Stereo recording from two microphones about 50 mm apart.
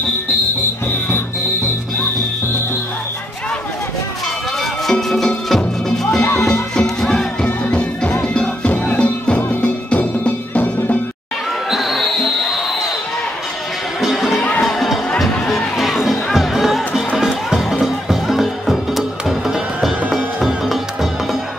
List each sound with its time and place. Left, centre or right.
4.9 s music: centre; by 10.7 s left
11.7 s basketball bounce: centre
14.4 s music: left
15.1 s music: centre